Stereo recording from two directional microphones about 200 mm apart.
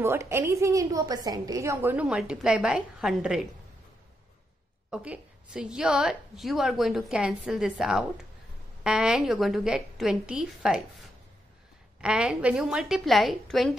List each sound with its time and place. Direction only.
0.0 s a woman's voice: 10° right (ahead or behind)
4.9 s a woman's voice: 5° right (ahead or behind)
12.0 s a woman's voice: 5° right (ahead or behind)